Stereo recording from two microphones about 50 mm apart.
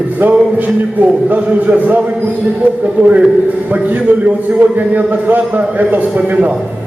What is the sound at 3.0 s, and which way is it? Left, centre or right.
A man's voice, right.